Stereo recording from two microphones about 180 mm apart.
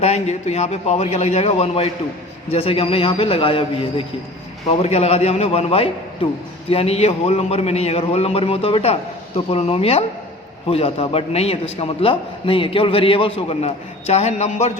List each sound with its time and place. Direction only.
0.0 s a man's voice: 35° left (ahead or behind)